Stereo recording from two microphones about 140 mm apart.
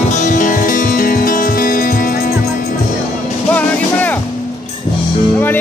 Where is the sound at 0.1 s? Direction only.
65° left (ahead or behind); by 2.3 s 85° left.